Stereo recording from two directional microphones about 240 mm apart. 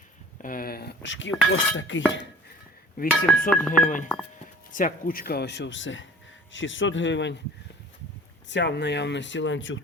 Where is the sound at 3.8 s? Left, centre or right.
Left.